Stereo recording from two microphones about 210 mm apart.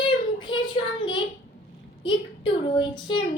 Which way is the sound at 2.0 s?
20° left (ahead or behind).